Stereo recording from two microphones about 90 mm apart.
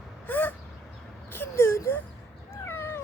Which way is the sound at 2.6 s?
25° left (ahead or behind).